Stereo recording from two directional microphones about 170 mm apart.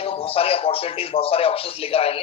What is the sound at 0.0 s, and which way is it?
A man's voice, 35° left (ahead or behind).